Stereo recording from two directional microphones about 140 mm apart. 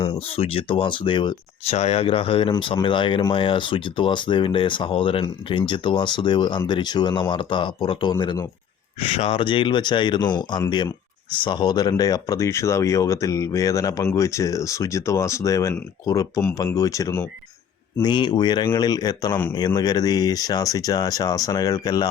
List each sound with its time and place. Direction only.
0.0 s speech: 40° left (ahead or behind)
9.0 s speech: 45° left (ahead or behind); by 22.1 s 25° left (ahead or behind)